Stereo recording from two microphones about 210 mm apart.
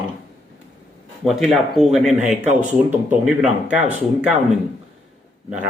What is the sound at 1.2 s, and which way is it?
Speech, centre (ahead or behind).